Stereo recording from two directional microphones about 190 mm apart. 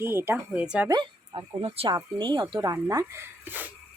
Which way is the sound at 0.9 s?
20° right (ahead or behind).